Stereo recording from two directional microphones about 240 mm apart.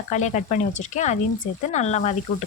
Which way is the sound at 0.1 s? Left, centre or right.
Left.